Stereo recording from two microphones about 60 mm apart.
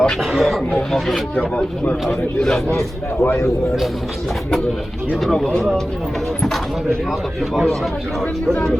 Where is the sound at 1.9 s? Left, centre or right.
Centre.